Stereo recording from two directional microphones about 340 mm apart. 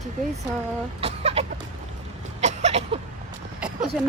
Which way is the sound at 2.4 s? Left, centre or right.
Centre.